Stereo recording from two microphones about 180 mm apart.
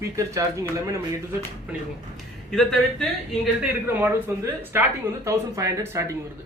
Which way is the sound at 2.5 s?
5° left (ahead or behind).